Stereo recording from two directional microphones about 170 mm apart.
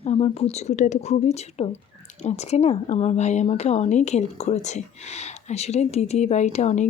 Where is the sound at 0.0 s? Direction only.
35° left (ahead or behind).